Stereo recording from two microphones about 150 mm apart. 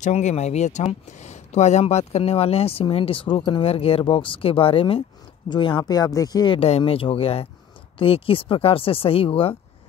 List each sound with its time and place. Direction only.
0.0 s speech: 50° left (ahead or behind)